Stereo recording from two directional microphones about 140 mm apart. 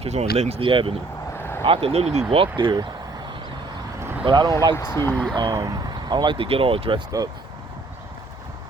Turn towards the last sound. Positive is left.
turn(degrees=-40)  # may be behind; listen again after turning